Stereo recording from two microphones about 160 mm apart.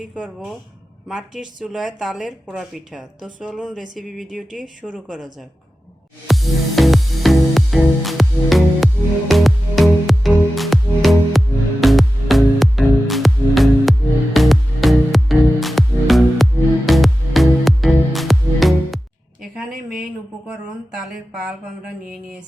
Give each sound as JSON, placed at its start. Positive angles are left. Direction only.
{"t": 0.0, "sound": "speech", "side_deg": -5}
{"t": 6.2, "sound": "music", "side_deg": 0}
{"t": 19.7, "sound": "a sound", "side_deg": -65}